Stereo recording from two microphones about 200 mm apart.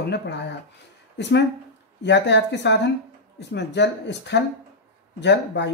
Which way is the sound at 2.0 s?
60° left (ahead or behind).